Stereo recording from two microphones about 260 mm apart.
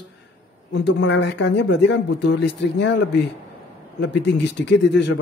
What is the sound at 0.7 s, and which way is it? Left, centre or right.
Speech, left.